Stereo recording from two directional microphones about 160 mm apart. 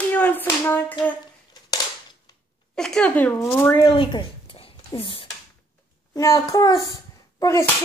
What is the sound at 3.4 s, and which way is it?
Speech, 20° left (ahead or behind).